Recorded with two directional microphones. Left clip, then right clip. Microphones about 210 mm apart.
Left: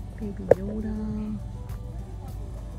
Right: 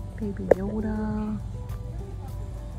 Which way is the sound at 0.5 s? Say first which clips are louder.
Left 1 dB; centre (ahead or behind).